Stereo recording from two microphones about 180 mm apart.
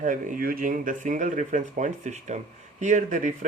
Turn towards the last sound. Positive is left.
turn(degrees=-45)  # may be behind; listen again after turning